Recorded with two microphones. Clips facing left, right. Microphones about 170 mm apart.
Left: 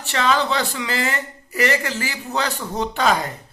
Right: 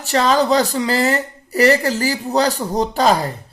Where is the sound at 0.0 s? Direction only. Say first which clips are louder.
Right 5 dB; 40° right (ahead or behind).